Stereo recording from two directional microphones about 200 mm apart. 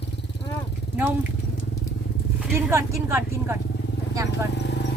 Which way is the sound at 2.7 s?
15° right (ahead or behind).